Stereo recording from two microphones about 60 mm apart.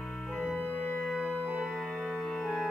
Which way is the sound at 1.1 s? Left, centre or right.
Centre.